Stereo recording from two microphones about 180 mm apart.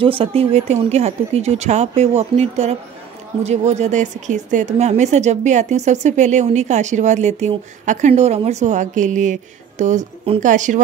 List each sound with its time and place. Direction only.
0.0 s speech: 30° right (ahead or behind)